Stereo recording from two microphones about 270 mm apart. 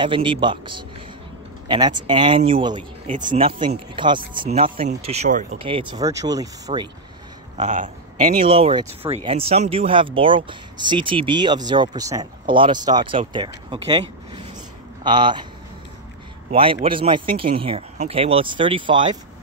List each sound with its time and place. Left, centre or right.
0.0 s speech: centre
7.5 s speech: right
13.7 s a sound: centre
15.0 s speech: centre
16.4 s a man's voice: centre